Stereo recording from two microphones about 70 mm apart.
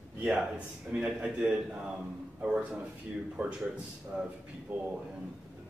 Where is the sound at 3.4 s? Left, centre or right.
Right.